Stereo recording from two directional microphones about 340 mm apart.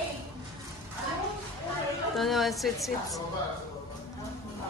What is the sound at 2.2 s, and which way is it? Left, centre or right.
Speech, centre.